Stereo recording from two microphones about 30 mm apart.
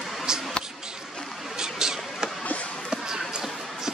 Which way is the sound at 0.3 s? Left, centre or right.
Right.